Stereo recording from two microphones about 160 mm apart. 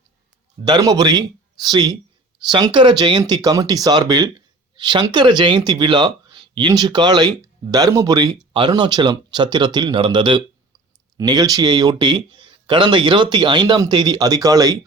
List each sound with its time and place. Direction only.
0.6 s speech: 25° right (ahead or behind)